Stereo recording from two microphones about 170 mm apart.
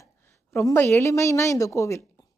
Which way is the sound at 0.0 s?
15° left (ahead or behind).